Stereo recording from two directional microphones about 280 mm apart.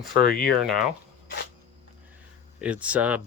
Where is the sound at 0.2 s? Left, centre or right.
Left.